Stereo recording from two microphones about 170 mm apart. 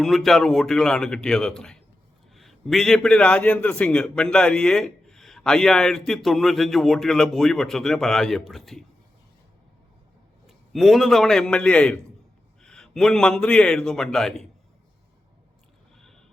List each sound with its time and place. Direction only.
0.0 s a man's voice: centre (ahead or behind)
10.4 s a man's voice: centre (ahead or behind)
16.0 s horse: centre (ahead or behind)